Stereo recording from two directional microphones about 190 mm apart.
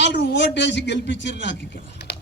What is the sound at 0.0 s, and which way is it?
A man's voice, 70° left (ahead or behind).